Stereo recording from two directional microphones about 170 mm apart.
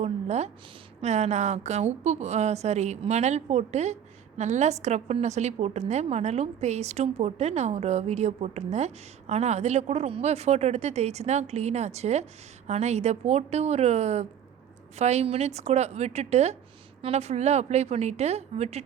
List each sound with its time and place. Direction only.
0.0 s a woman's voice: 40° right (ahead or behind)